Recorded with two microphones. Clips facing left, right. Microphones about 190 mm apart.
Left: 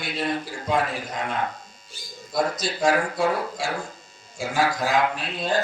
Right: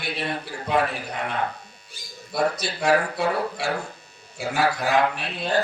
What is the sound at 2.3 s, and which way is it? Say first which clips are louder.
A man's voice: even; 65° right (ahead or behind).